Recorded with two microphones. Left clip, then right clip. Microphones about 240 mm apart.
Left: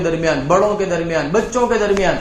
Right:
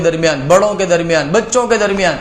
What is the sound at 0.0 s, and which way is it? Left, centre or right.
A man's voice, right.